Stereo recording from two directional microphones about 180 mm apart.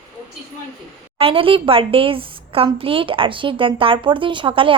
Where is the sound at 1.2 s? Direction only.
30° right (ahead or behind).